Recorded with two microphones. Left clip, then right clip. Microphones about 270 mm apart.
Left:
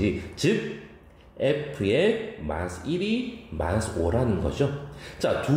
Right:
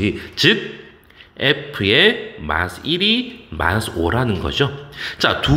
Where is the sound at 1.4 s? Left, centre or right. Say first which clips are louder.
Right 7 dB; right.